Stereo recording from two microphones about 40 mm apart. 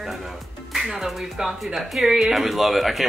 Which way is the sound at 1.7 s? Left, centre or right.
Centre.